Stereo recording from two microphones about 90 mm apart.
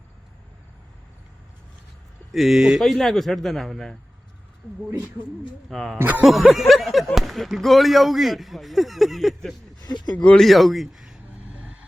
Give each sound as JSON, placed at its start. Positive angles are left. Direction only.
{"t": 2.3, "sound": "speech", "side_deg": 0}
{"t": 5.7, "sound": "speech", "side_deg": 5}
{"t": 6.0, "sound": "speech", "side_deg": -20}
{"t": 6.2, "sound": "speech", "side_deg": 0}
{"t": 9.8, "sound": "speech", "side_deg": 50}
{"t": 10.4, "sound": "a man's voice", "side_deg": 0}